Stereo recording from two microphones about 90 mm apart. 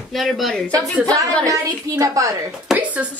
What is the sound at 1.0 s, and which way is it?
A woman's voice, 40° right (ahead or behind).